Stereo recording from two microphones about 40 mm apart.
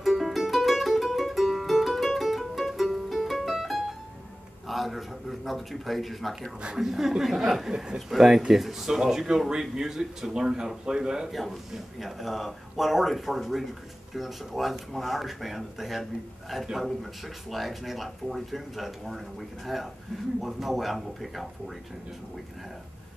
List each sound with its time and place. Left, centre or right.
0.0 s music: centre
4.6 s a sound: centre
6.8 s speech: centre
8.1 s speech: centre
11.3 s speech: centre